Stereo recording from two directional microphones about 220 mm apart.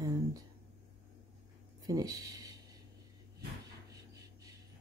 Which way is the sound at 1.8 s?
15° right (ahead or behind).